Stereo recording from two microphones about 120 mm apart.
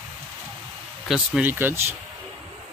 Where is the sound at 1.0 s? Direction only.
Centre (ahead or behind).